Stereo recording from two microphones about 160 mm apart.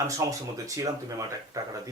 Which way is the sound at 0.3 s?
20° right (ahead or behind).